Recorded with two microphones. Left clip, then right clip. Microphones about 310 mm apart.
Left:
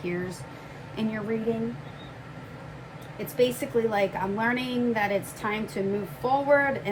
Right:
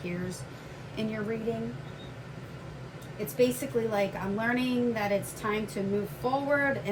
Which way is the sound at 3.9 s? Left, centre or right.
Left.